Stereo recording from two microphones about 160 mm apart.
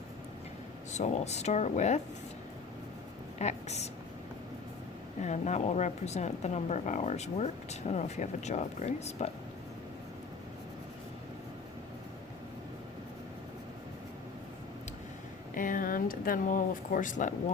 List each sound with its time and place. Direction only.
0.9 s speech: 45° left (ahead or behind)
3.3 s speech: 45° left (ahead or behind)
5.2 s speech: 50° left (ahead or behind)
15.5 s speech: 55° left (ahead or behind)